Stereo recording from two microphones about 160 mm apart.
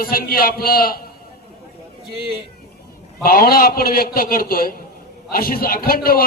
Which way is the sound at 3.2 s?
70° left (ahead or behind).